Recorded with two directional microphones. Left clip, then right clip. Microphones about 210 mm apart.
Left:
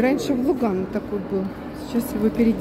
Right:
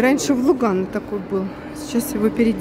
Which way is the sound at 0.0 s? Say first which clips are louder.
Right 4 dB; 20° right (ahead or behind).